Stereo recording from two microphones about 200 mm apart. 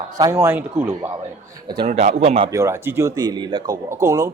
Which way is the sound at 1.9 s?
35° right (ahead or behind).